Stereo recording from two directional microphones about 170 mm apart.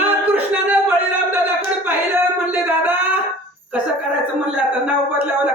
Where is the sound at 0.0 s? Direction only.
10° right (ahead or behind).